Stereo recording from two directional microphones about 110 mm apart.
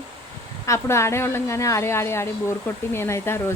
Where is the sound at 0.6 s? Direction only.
25° left (ahead or behind).